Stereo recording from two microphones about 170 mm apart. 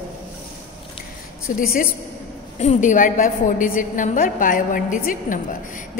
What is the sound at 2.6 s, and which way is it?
A woman's voice, 45° left (ahead or behind).